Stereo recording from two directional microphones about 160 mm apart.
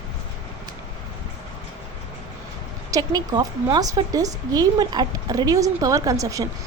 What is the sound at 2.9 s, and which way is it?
A woman's voice, 25° right (ahead or behind).